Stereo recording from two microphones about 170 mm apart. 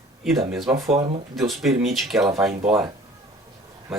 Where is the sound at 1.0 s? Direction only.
40° right (ahead or behind).